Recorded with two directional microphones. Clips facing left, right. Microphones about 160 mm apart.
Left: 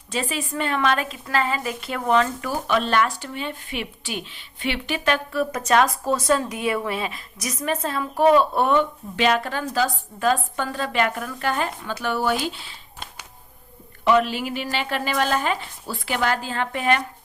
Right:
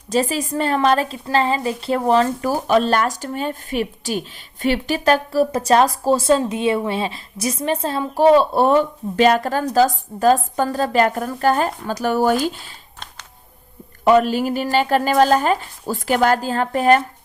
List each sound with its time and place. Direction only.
0.1 s a woman's voice: 40° right (ahead or behind)
14.0 s speech: 40° right (ahead or behind)